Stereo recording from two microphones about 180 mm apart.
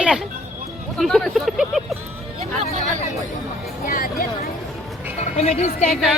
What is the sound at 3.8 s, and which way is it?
Music, 50° left (ahead or behind).